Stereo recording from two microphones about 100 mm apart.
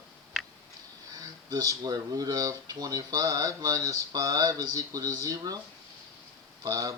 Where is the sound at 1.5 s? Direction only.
40° right (ahead or behind).